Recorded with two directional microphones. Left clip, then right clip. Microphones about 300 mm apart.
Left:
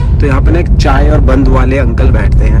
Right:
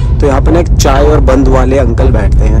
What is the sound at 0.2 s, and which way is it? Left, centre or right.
Speech, centre.